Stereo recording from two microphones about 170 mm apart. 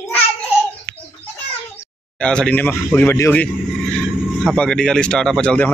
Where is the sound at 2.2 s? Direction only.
5° left (ahead or behind).